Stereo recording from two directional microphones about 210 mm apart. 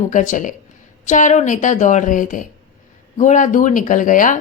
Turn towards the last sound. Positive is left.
turn(degrees=40)  # may be behind; listen again after turning